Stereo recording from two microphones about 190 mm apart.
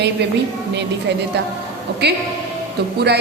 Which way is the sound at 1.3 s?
60° right (ahead or behind).